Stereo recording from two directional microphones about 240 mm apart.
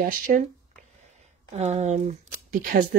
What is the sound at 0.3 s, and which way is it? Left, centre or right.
Speech, right.